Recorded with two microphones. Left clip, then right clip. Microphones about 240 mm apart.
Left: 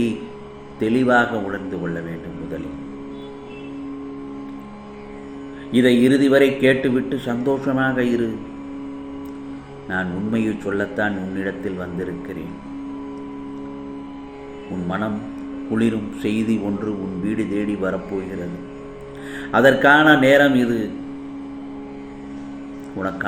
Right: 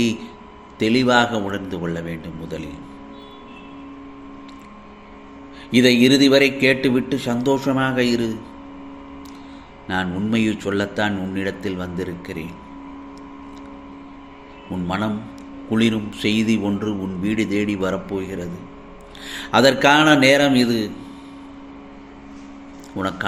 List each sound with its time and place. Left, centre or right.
0.8 s a man's voice: right
5.7 s a man's voice: right
9.9 s a man's voice: right
14.8 s a man's voice: right
19.5 s a man's voice: right
23.0 s a man's voice: right